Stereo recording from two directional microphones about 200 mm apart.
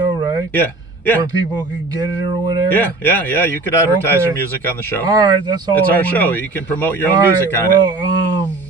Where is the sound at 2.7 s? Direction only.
10° left (ahead or behind).